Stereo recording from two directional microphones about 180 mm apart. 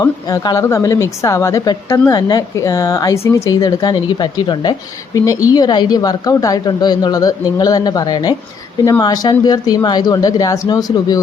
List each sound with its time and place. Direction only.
0.0 s speech: 20° left (ahead or behind)